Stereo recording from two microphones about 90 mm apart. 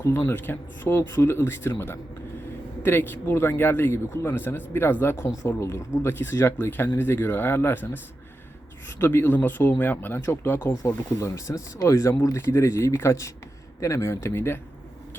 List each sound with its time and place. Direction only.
0.3 s speech: 25° left (ahead or behind)
2.8 s speech: 25° left (ahead or behind)
9.0 s speech: 25° left (ahead or behind)